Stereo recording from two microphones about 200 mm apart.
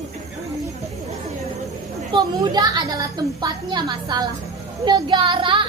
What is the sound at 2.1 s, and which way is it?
A woman's voice, 20° right (ahead or behind).